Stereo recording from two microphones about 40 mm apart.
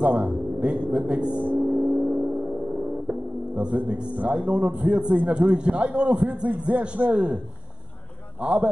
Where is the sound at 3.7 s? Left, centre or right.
Right.